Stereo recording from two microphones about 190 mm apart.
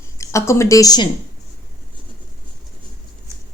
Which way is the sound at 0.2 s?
15° left (ahead or behind).